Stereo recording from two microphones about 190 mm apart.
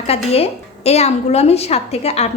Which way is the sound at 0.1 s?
35° left (ahead or behind).